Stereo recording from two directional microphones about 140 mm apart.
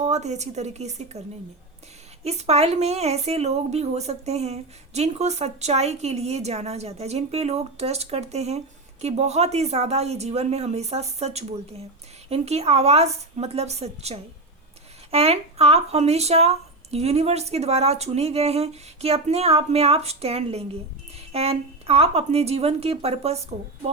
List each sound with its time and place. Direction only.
0.0 s speech: 55° right (ahead or behind)
2.2 s speech: 50° right (ahead or behind)